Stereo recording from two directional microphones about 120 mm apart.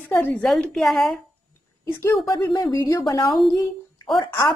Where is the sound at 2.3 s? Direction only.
35° left (ahead or behind).